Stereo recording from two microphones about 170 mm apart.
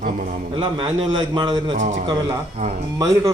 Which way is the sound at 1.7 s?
45° right (ahead or behind).